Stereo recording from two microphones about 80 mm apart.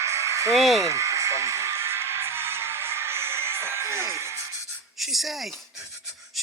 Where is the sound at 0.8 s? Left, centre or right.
Right.